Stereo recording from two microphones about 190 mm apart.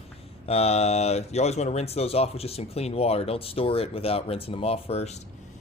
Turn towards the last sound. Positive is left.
turn(degrees=30)  # may be behind; listen again after turning